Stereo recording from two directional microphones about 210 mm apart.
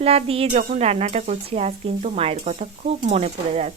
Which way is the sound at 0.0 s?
30° right (ahead or behind).